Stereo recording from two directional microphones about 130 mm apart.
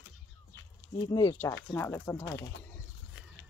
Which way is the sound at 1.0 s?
30° left (ahead or behind).